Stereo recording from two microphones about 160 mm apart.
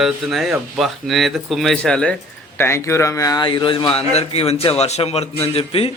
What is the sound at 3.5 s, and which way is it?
A man's voice, 30° left (ahead or behind).